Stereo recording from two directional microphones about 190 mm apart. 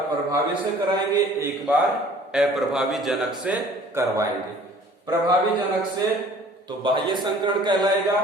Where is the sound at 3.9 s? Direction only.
15° right (ahead or behind).